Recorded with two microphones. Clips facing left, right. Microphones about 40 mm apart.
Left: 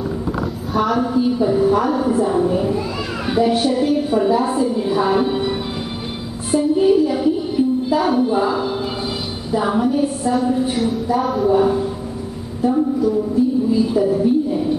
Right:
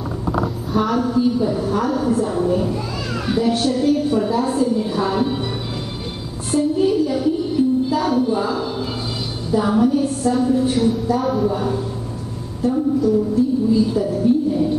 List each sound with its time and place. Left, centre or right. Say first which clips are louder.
0.9 s a woman's voice: even; centre
6.5 s a woman's voice: left 3 dB; centre